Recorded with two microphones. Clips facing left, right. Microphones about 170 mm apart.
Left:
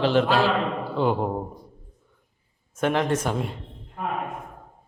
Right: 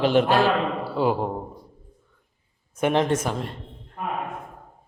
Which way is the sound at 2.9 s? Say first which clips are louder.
Right 2 dB; 20° right (ahead or behind).